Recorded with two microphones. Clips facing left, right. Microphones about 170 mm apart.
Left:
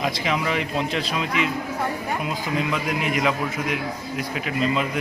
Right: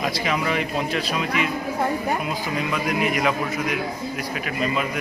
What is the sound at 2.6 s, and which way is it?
Speech, 20° left (ahead or behind).